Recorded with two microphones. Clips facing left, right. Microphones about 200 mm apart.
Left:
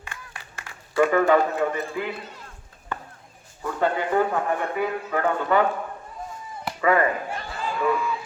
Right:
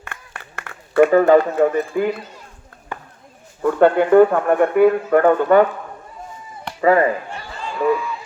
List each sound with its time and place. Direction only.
0.0 s a sound: 60° right (ahead or behind)
1.3 s a man's voice: 40° right (ahead or behind)
3.6 s speech: 60° right (ahead or behind)
6.8 s a man's voice: 30° right (ahead or behind)